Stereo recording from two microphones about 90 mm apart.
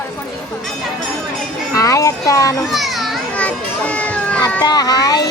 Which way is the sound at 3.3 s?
15° left (ahead or behind).